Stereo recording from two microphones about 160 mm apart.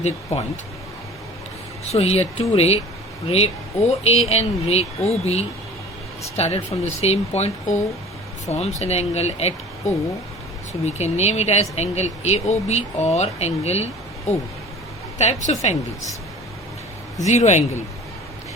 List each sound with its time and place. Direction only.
0.3 s speech: 40° left (ahead or behind)
1.8 s speech: 40° left (ahead or behind)
10.7 s speech: 45° left (ahead or behind)
17.2 s speech: 45° left (ahead or behind)